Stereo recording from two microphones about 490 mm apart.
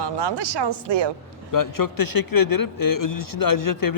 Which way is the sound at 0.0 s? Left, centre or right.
Right.